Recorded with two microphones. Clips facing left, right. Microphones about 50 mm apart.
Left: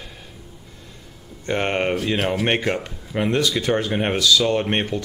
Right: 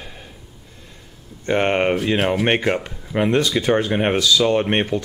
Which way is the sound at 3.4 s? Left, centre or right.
Right.